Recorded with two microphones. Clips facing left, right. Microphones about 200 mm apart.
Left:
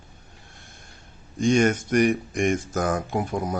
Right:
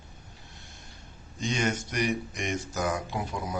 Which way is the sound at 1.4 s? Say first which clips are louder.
Left 10 dB; 50° left (ahead or behind).